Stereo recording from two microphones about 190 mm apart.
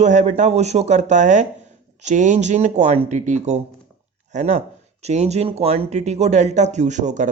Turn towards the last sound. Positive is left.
turn(degrees=-40)  # may be behind; listen again after turning